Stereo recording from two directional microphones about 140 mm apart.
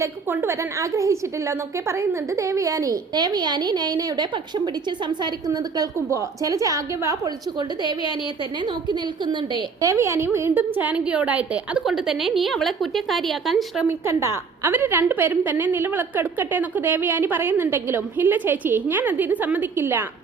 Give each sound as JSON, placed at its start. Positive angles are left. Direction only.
{"t": 0.0, "sound": "a woman's voice", "side_deg": -20}
{"t": 9.8, "sound": "a woman's voice", "side_deg": -20}
{"t": 13.8, "sound": "a woman's voice", "side_deg": -20}